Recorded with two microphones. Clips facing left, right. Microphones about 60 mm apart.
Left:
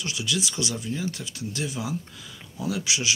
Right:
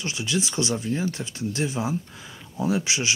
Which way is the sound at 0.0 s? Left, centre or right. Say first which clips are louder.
Right 2 dB; right.